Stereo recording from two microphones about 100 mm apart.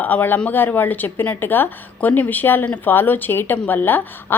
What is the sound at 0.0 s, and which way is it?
A woman's voice, 15° left (ahead or behind).